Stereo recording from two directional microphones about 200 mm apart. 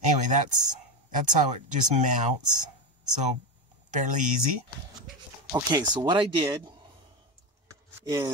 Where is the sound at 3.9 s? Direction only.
40° right (ahead or behind).